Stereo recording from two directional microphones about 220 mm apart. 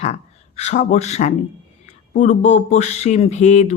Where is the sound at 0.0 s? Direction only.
30° left (ahead or behind).